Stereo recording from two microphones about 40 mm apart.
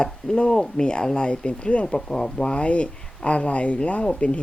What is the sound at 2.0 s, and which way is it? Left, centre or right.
Speech, centre.